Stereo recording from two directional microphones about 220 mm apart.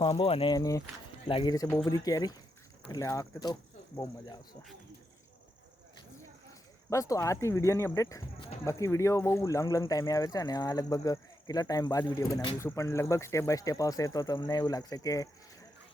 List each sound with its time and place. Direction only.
0.0 s speech: 25° left (ahead or behind)
6.9 s speech: 15° left (ahead or behind)